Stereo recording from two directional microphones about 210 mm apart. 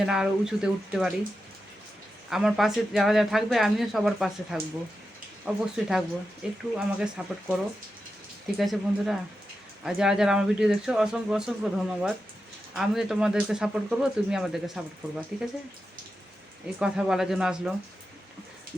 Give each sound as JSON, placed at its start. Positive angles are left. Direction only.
{"t": 0.0, "sound": "speech", "side_deg": -5}
{"t": 2.3, "sound": "speech", "side_deg": 0}
{"t": 5.7, "sound": "speech", "side_deg": 0}
{"t": 16.8, "sound": "speech", "side_deg": 0}